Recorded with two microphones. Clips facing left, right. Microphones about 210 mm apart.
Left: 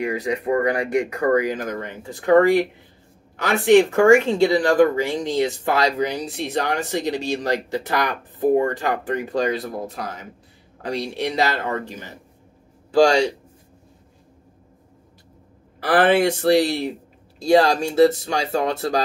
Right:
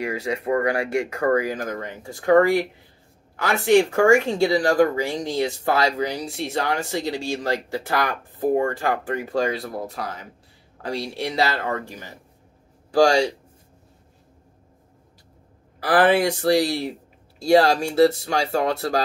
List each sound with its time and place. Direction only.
0.0 s speech: 15° left (ahead or behind)
15.8 s speech: 25° left (ahead or behind)